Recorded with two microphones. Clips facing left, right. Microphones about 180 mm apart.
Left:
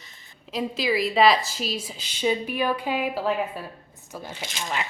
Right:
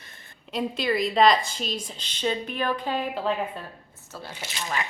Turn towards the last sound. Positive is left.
turn(degrees=-5)  # may be behind; listen again after turning